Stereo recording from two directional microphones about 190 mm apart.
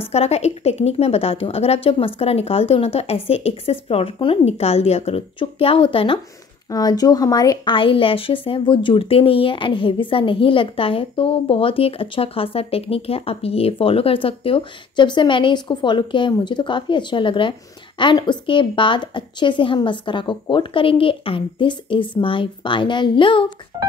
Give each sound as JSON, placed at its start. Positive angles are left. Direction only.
{"t": 0.1, "sound": "a woman's voice", "side_deg": 35}